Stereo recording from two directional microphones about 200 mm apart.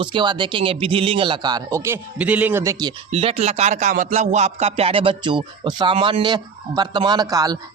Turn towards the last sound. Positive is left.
turn(degrees=-20)  # may be behind; listen again after turning